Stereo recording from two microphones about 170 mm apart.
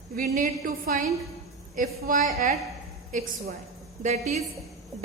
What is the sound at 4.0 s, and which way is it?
Speech, 40° right (ahead or behind).